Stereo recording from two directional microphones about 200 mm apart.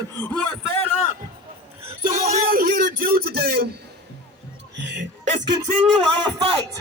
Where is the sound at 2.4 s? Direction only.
45° right (ahead or behind).